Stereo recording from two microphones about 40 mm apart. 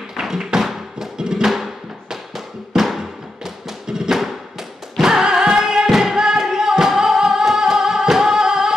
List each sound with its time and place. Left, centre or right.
0.1 s tap: centre
0.7 s music: centre
1.5 s music: centre
4.2 s music: centre
5.9 s music: centre
6.1 s music: centre